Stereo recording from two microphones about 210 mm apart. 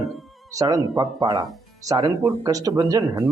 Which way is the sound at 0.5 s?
15° right (ahead or behind).